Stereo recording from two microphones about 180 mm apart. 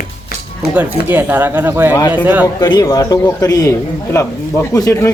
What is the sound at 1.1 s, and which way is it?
Speech, 10° right (ahead or behind).